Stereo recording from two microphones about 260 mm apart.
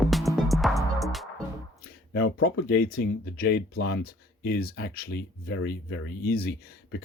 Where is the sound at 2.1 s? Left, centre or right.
Left.